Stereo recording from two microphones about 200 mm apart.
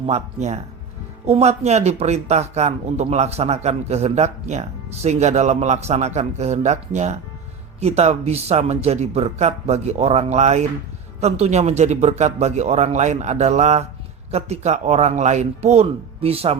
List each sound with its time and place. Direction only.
0.0 s speech: 35° right (ahead or behind)